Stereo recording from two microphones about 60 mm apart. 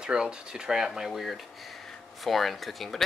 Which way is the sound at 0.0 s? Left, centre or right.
Centre.